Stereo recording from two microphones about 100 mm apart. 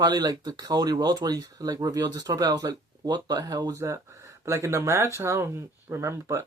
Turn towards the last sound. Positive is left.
turn(degrees=-25)  # may be behind; listen again after turning